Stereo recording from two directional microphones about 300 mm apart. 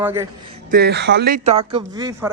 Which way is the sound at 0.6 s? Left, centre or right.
Right.